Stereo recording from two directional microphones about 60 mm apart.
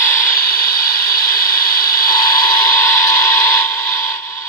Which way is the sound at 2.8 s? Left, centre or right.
Left.